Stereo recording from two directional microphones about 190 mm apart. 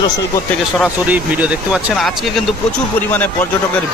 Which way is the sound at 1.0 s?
10° right (ahead or behind).